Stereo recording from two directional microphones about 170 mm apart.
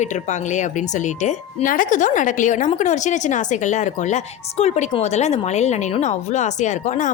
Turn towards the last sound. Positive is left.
turn(degrees=45)  # may be behind; listen again after turning